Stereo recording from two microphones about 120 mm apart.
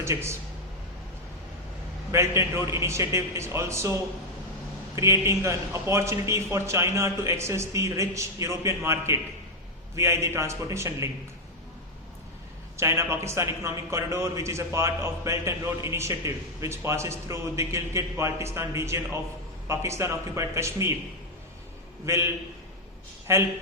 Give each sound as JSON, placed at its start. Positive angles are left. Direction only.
{"t": 0.0, "sound": "speech", "side_deg": -20}
{"t": 2.1, "sound": "a man's voice", "side_deg": -25}
{"t": 4.9, "sound": "a man's voice", "side_deg": -25}
{"t": 12.7, "sound": "a man's voice", "side_deg": -25}
{"t": 22.0, "sound": "a man's voice", "side_deg": -20}
{"t": 23.3, "sound": "a man's voice", "side_deg": -25}